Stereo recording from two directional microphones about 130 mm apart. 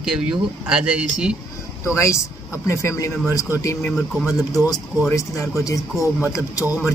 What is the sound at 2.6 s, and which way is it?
Speech, 25° left (ahead or behind).